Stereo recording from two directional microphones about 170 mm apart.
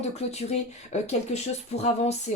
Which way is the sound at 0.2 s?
40° left (ahead or behind).